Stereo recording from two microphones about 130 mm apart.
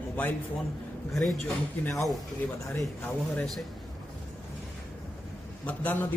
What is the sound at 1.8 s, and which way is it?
A man's voice, 20° left (ahead or behind).